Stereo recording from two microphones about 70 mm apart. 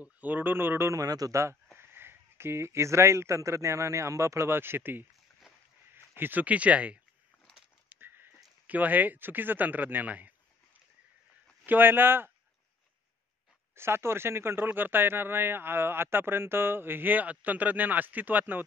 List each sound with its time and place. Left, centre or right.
0.0 s speech: right
1.0 s a man's voice: right
1.8 s speech: right
6.1 s speech: right
8.0 s a sound: right
8.6 s speech: right
11.6 s speech: right
13.7 s speech: right